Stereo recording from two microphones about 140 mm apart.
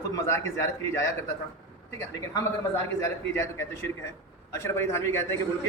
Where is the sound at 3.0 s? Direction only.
15° left (ahead or behind).